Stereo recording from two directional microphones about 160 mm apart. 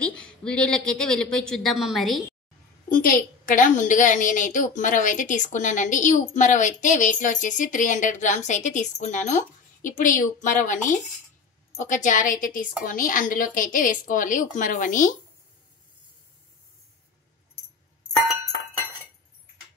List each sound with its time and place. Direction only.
0.0 s a woman's voice: 5° left (ahead or behind)
2.9 s a woman's voice: 60° left (ahead or behind)